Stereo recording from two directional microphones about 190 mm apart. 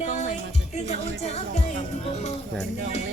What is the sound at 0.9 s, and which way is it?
Speech, 35° left (ahead or behind).